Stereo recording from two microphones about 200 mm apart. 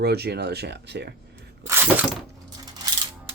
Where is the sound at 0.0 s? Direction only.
55° right (ahead or behind).